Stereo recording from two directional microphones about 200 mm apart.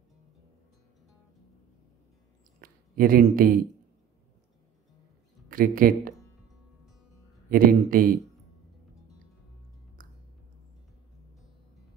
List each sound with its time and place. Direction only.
2.6 s speech: 45° right (ahead or behind)
5.5 s speech: 45° right (ahead or behind)
7.4 s speech: 45° right (ahead or behind)